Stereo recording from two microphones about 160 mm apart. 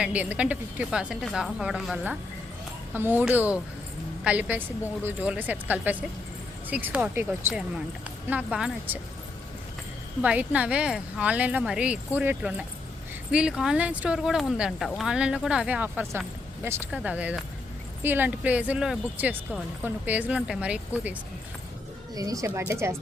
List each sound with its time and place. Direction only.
0.0 s a woman's voice: 10° right (ahead or behind)
10.2 s a woman's voice: 10° right (ahead or behind)
22.1 s a woman's voice: 20° right (ahead or behind)